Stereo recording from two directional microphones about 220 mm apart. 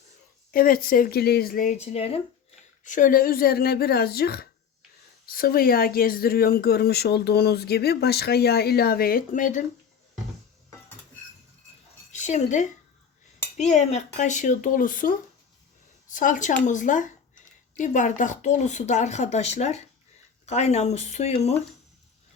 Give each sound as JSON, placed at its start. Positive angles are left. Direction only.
{"t": 0.5, "sound": "speech", "side_deg": 40}
{"t": 12.1, "sound": "speech", "side_deg": 35}